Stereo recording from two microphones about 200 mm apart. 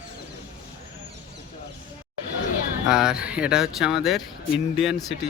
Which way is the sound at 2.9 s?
5° right (ahead or behind).